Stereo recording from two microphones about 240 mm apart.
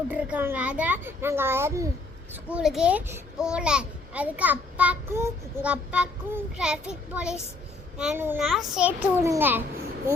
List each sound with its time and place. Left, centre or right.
0.1 s a child's voice: centre